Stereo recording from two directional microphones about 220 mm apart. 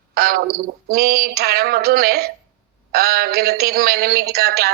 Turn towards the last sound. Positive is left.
turn(degrees=-45)  # may be behind; listen again after turning